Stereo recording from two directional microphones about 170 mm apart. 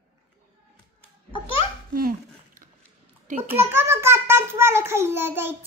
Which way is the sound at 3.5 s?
15° right (ahead or behind).